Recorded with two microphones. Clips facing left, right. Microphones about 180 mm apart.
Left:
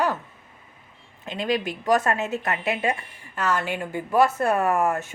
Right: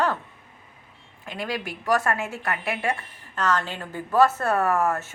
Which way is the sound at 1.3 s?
20° left (ahead or behind).